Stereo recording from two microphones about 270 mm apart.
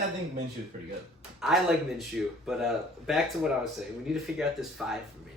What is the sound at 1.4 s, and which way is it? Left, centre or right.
Speech, centre.